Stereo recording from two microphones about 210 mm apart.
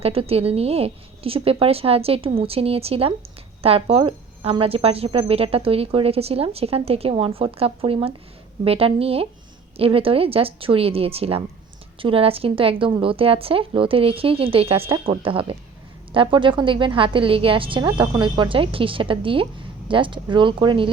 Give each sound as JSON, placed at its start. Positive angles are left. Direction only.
{"t": 0.0, "sound": "a woman's voice", "side_deg": -30}